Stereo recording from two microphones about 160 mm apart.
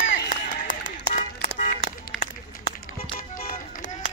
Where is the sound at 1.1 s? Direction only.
60° left (ahead or behind).